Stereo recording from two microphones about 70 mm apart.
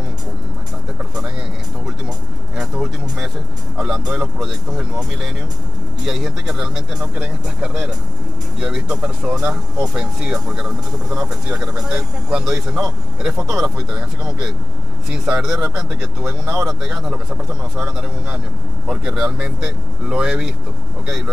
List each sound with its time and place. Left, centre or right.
1.9 s vehicle: centre
3.7 s speech: centre